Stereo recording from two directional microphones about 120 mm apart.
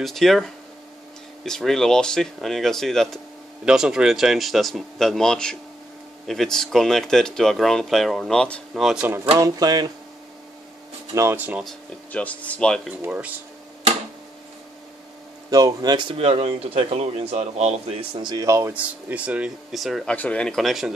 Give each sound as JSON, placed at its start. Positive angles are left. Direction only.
{"t": 0.0, "sound": "speech", "side_deg": 0}
{"t": 9.4, "sound": "speech", "side_deg": -35}
{"t": 11.1, "sound": "speech", "side_deg": -20}
{"t": 12.1, "sound": "speech", "side_deg": 10}
{"t": 13.0, "sound": "speech", "side_deg": -10}
{"t": 15.5, "sound": "speech", "side_deg": -35}
{"t": 16.2, "sound": "speech", "side_deg": -55}
{"t": 18.1, "sound": "speech", "side_deg": -40}
{"t": 18.7, "sound": "speech", "side_deg": -10}
{"t": 20.2, "sound": "speech", "side_deg": 10}